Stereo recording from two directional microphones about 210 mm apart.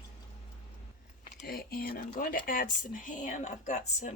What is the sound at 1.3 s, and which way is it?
Speech, 45° left (ahead or behind).